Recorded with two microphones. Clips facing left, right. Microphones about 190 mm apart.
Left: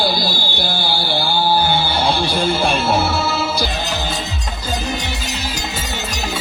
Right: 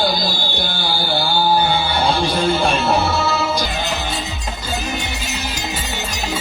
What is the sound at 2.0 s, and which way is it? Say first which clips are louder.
Music: right 2 dB; centre (ahead or behind).